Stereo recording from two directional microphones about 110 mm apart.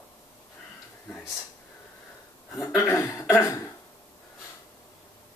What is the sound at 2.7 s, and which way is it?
Speech, 25° left (ahead or behind).